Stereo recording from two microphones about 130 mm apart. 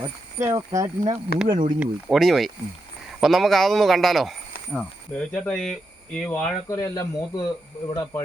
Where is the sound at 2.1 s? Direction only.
Centre (ahead or behind).